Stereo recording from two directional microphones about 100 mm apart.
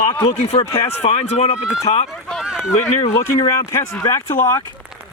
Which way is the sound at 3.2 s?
35° left (ahead or behind).